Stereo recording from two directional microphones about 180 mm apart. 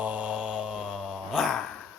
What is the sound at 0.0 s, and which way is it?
Mantra, 10° right (ahead or behind).